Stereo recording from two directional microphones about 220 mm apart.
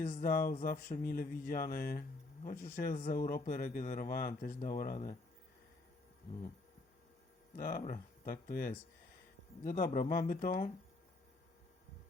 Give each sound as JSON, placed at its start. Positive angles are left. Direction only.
{"t": 0.0, "sound": "speech", "side_deg": 40}
{"t": 7.5, "sound": "speech", "side_deg": 40}